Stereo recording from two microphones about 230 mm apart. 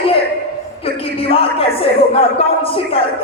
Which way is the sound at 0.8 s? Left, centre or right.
Left.